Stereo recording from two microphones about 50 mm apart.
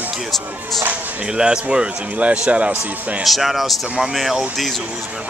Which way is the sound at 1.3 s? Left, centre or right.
Centre.